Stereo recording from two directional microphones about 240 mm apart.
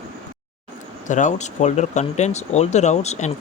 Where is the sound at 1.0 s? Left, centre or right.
Left.